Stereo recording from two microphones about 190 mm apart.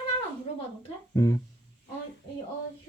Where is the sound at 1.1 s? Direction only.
15° left (ahead or behind).